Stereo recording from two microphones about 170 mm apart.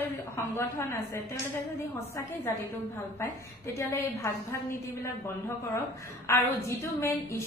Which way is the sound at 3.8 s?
15° left (ahead or behind).